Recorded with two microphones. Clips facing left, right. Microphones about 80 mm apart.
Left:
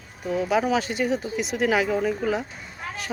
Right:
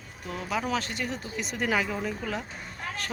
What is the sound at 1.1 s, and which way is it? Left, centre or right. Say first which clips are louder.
Speech: left 8 dB; centre.